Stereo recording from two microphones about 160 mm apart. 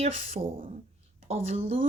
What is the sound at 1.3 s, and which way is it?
Speech, 40° right (ahead or behind).